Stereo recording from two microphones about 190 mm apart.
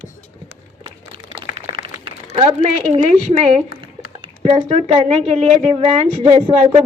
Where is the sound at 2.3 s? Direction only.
30° right (ahead or behind).